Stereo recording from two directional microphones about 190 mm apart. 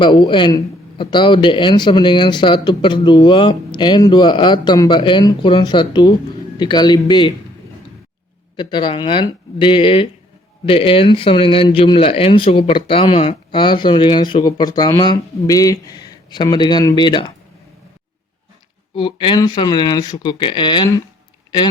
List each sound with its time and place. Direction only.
0.0 s speech: 25° left (ahead or behind)
8.5 s speech: 25° left (ahead or behind)
18.9 s speech: 25° left (ahead or behind)